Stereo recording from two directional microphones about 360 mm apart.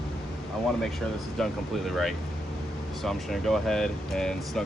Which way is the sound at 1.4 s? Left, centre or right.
Centre.